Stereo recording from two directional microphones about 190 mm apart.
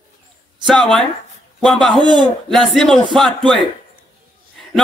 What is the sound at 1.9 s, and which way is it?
Speech, 25° right (ahead or behind).